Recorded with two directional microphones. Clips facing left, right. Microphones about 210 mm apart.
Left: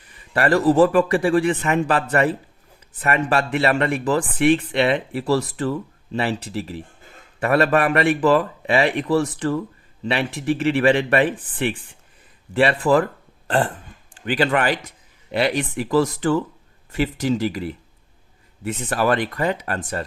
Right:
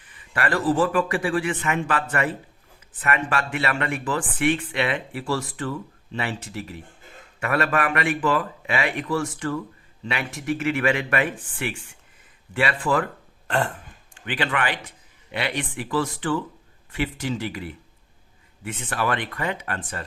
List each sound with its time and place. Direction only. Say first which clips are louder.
0.0 s speech: left 6 dB; 40° left (ahead or behind)